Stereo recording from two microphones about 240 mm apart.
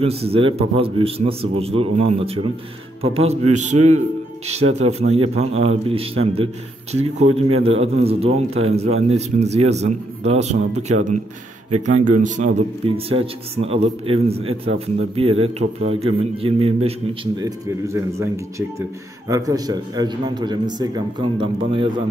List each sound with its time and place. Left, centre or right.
0.0 s speech: right
4.7 s speech: right